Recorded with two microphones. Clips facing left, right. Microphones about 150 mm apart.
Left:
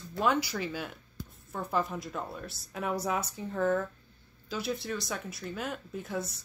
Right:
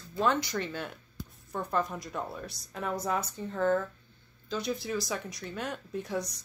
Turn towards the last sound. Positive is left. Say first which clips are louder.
# right 2 dB
turn(degrees=5)  # may be behind; listen again after turning